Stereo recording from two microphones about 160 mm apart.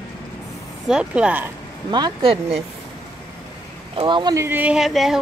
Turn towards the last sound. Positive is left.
turn(degrees=0)  # may be behind; listen again after turning